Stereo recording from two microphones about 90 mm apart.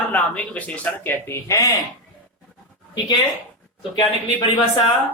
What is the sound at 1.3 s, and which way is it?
Speech, 35° left (ahead or behind).